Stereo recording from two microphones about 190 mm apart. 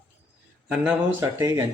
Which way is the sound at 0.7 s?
5° right (ahead or behind).